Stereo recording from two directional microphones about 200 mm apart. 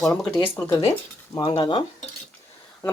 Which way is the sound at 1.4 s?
20° left (ahead or behind).